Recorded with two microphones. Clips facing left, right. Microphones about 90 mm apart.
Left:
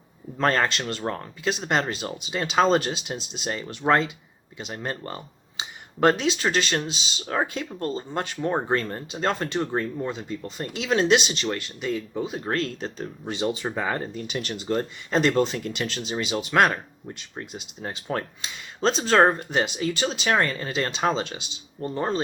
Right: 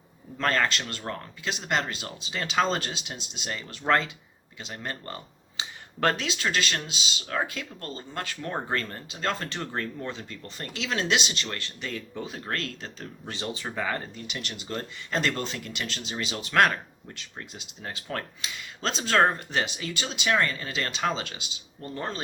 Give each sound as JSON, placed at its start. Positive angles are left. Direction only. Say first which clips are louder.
{"t": 0.3, "sound": "speech", "louder": "left 3 dB", "side_deg": 30}
{"t": 9.7, "sound": "speech", "louder": "left 6 dB", "side_deg": 15}
{"t": 10.8, "sound": "speech", "louder": "left 7 dB", "side_deg": 25}
{"t": 14.2, "sound": "speech", "louder": "left 7 dB", "side_deg": 35}